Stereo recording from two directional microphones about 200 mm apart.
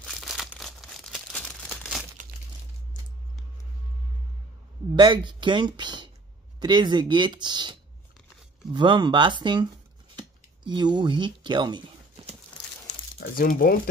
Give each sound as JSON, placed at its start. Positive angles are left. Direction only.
{"t": 0.0, "sound": "crumpling", "side_deg": 0}
{"t": 4.9, "sound": "speech", "side_deg": -25}
{"t": 8.7, "sound": "speech", "side_deg": -20}
{"t": 13.2, "sound": "speech", "side_deg": 50}